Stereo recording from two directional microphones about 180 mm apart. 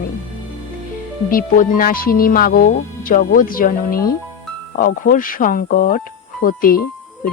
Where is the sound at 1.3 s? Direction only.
50° left (ahead or behind).